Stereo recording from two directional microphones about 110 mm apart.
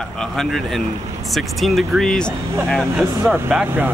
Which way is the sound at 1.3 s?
Centre (ahead or behind).